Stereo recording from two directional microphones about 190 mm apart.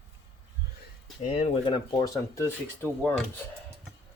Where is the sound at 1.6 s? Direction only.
20° left (ahead or behind).